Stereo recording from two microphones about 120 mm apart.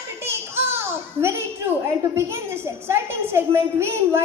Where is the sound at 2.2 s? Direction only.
20° right (ahead or behind).